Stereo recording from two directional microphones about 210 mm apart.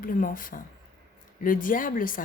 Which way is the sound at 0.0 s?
40° left (ahead or behind).